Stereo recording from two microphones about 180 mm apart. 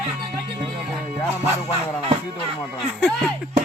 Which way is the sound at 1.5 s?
15° left (ahead or behind).